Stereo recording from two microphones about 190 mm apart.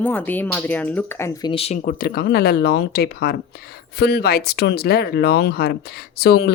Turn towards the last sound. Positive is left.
turn(degrees=55)  # may be behind; listen again after turning